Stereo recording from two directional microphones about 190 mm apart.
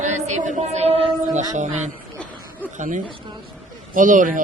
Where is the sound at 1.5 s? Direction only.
40° right (ahead or behind).